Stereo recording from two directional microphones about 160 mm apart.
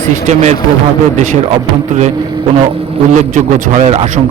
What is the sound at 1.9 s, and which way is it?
Speech, 50° right (ahead or behind).